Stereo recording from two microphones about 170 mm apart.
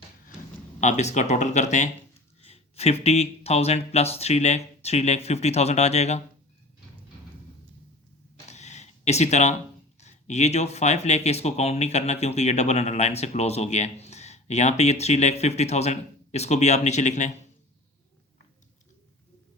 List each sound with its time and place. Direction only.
0.8 s speech: 40° left (ahead or behind)
8.4 s a sound: 40° left (ahead or behind)
10.0 s speech: 40° left (ahead or behind)